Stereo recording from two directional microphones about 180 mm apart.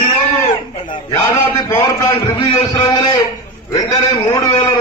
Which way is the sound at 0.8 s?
20° left (ahead or behind).